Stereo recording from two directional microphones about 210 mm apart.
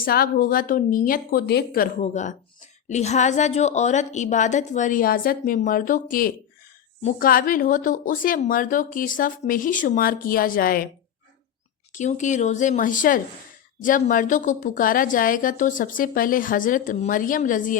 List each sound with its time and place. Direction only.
0.0 s a woman's voice: 45° left (ahead or behind)
11.9 s a woman's voice: 35° left (ahead or behind)